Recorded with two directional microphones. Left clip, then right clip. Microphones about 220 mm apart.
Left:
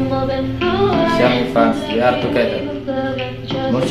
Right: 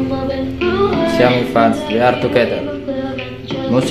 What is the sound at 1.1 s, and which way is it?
Speech, 50° right (ahead or behind).